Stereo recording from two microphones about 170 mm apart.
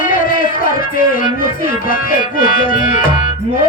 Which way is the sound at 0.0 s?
55° left (ahead or behind).